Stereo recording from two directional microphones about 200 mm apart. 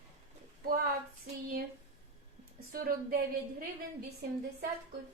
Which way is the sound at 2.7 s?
45° right (ahead or behind).